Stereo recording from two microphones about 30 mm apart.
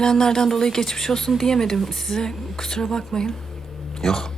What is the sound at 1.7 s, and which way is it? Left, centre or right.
Speech, centre.